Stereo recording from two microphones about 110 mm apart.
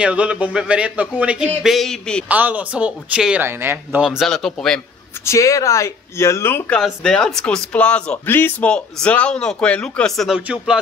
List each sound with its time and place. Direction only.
0.0 s speech: 10° right (ahead or behind); by 2.2 s 5° left (ahead or behind)
2.2 s speech: 15° right (ahead or behind)
4.0 s speech: centre (ahead or behind)
5.2 s speech: 30° left (ahead or behind)
6.8 s a man's voice: 5° left (ahead or behind)